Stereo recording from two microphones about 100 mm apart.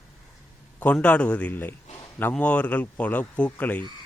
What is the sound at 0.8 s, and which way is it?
A man's voice, 15° left (ahead or behind).